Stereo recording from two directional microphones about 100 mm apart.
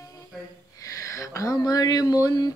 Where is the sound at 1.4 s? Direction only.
35° left (ahead or behind).